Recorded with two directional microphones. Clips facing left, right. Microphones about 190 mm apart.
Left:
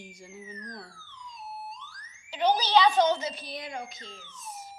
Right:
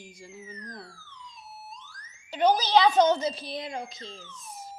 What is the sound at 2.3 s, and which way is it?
A child's voice, 45° right (ahead or behind).